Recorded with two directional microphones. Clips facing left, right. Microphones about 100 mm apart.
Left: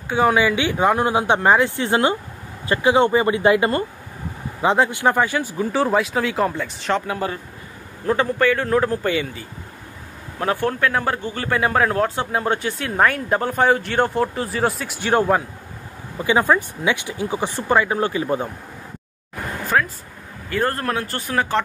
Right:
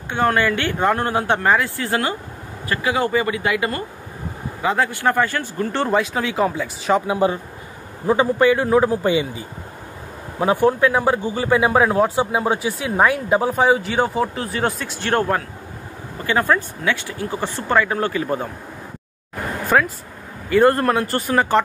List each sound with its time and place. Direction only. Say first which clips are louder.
0.1 s speech: left 1 dB; 5° left (ahead or behind)
7.1 s speech: right 6 dB; 20° right (ahead or behind); by 18.5 s 15° left (ahead or behind)
19.6 s a sound: right 3 dB; centre (ahead or behind)
20.4 s speech: right 7 dB; centre (ahead or behind)